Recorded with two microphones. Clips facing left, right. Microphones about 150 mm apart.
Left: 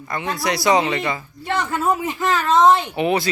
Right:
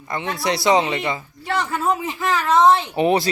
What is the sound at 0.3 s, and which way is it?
Speech, 25° right (ahead or behind).